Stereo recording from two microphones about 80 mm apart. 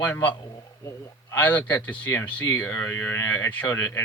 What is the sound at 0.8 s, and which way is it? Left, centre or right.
Speech, left.